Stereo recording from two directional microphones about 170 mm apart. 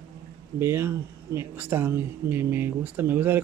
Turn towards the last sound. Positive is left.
turn(degrees=-10)  # may be behind; listen again after turning